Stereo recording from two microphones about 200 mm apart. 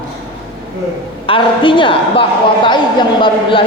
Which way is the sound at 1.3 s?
25° left (ahead or behind).